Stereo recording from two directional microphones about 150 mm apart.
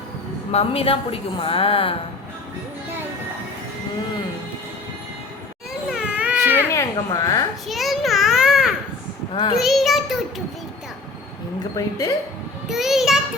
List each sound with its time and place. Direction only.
0.5 s a woman's voice: 40° left (ahead or behind)
5.9 s baby cry: 5° right (ahead or behind)
6.9 s a woman's voice: 25° left (ahead or behind)
7.7 s a sound: centre (ahead or behind)
9.3 s a woman's voice: 35° left (ahead or behind)
9.6 s a child's voice: centre (ahead or behind)
11.8 s a woman's voice: 20° left (ahead or behind)
12.6 s a child's voice: centre (ahead or behind)